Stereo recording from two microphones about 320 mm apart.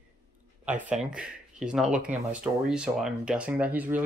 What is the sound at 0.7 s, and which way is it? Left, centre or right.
Speech, centre.